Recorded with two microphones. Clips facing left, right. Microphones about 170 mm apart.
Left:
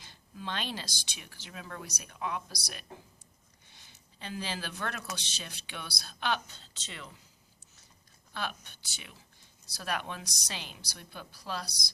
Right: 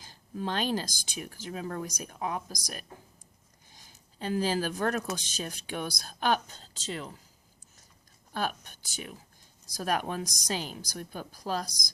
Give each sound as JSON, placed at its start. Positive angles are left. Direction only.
{"t": 0.0, "sound": "speech", "side_deg": -40}
{"t": 3.7, "sound": "a sound", "side_deg": -40}
{"t": 5.1, "sound": "speech", "side_deg": -45}
{"t": 8.3, "sound": "speech", "side_deg": -45}